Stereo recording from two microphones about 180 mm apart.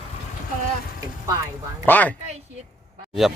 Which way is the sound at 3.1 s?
Centre (ahead or behind).